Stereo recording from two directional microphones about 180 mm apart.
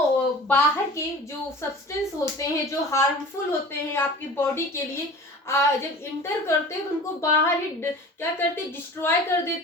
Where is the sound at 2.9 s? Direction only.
15° left (ahead or behind).